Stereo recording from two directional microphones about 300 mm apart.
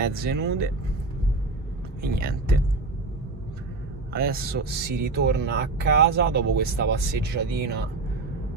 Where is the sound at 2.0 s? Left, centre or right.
Right.